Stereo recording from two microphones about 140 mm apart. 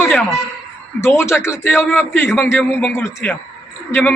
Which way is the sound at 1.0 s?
20° left (ahead or behind).